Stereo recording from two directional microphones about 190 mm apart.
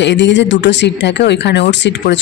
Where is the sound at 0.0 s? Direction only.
70° left (ahead or behind).